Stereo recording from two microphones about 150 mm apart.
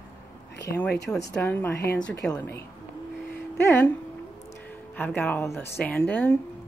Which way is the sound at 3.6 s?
15° left (ahead or behind).